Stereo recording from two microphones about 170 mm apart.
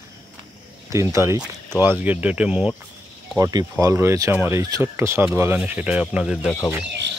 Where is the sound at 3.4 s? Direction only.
20° right (ahead or behind); by 6.5 s 5° right (ahead or behind).